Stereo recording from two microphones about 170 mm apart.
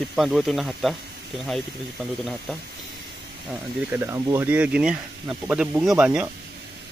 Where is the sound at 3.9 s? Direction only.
15° right (ahead or behind).